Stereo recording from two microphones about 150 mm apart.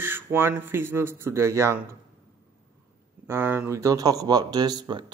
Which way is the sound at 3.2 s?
15° right (ahead or behind).